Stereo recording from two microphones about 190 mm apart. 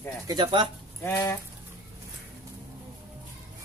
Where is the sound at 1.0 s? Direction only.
10° left (ahead or behind).